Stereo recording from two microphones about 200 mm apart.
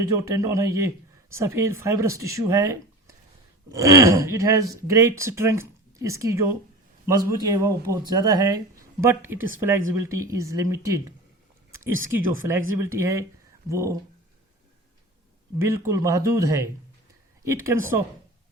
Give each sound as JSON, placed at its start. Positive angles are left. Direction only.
{"t": 0.0, "sound": "speech", "side_deg": -15}
{"t": 12.5, "sound": "speech", "side_deg": -15}
{"t": 15.6, "sound": "speech", "side_deg": -15}